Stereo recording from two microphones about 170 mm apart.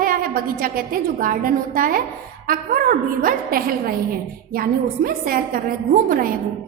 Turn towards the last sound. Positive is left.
turn(degrees=-55)  # may be behind; listen again after turning